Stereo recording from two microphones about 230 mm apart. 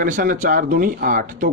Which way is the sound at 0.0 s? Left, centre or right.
Right.